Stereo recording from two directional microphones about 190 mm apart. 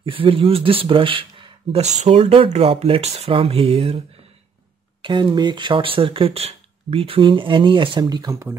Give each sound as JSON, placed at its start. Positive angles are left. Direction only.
{"t": 0.0, "sound": "speech", "side_deg": -30}
{"t": 5.0, "sound": "speech", "side_deg": -25}